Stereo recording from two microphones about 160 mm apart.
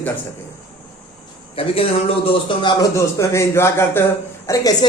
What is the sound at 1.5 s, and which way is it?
A man's voice, 35° left (ahead or behind).